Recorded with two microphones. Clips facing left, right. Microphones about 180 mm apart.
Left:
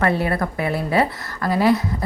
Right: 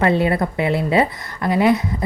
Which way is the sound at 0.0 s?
20° right (ahead or behind).